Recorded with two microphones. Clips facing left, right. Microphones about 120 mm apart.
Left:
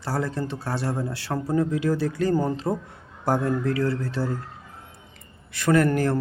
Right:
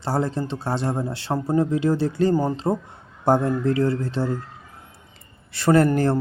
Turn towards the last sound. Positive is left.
turn(degrees=-30)  # may be behind; listen again after turning